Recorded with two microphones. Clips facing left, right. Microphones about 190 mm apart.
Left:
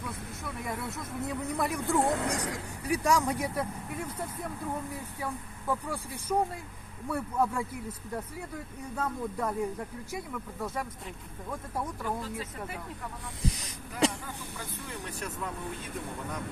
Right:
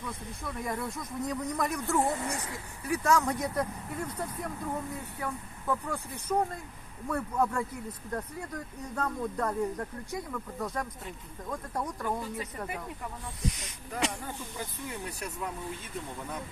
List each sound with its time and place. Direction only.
0.4 s speech: centre (ahead or behind)
2.0 s speech: 70° left (ahead or behind)
2.8 s speech: 15° left (ahead or behind)
5.2 s speech: 10° left (ahead or behind)
13.4 s speech: 35° left (ahead or behind)